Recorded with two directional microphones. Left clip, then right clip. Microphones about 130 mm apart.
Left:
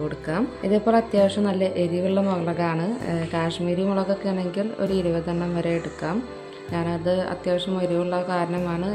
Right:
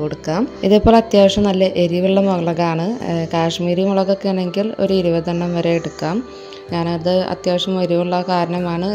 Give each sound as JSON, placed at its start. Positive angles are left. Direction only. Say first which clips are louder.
{"t": 0.7, "sound": "a woman's voice", "louder": "right 9 dB", "side_deg": -70}